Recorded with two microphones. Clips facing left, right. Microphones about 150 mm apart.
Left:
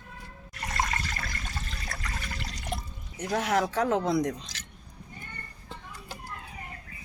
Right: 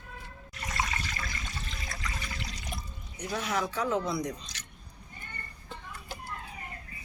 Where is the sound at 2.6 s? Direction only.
60° left (ahead or behind); by 4.1 s 85° left.